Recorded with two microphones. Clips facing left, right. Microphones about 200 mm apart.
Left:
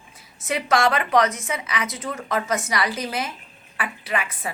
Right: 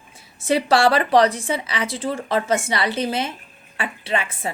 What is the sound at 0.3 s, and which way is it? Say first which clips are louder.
A woman's voice: right 4 dB; 30° right (ahead or behind).